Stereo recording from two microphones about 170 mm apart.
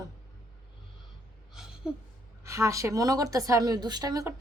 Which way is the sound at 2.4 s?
15° right (ahead or behind).